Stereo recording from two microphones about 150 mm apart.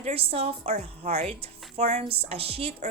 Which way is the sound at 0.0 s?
40° right (ahead or behind).